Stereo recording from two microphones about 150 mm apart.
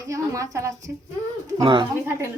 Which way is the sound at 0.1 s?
20° right (ahead or behind).